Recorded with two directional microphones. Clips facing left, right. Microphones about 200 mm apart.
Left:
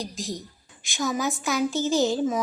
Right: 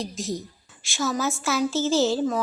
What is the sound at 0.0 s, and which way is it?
Speech, centre (ahead or behind).